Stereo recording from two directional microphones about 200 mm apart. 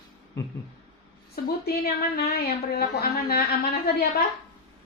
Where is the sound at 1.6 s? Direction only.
50° left (ahead or behind).